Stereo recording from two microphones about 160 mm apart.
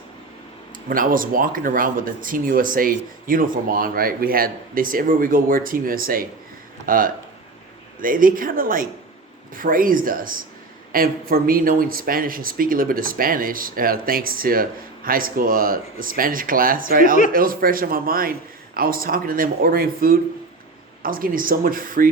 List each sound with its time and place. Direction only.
0.9 s speech: 60° right (ahead or behind)